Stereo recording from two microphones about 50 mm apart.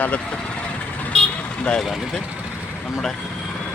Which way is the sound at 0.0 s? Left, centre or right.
Left.